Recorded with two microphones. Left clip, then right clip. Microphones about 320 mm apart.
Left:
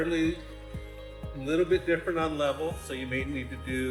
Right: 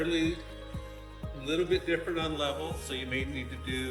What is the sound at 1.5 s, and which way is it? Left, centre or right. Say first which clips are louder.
A man's voice: left 3 dB; centre.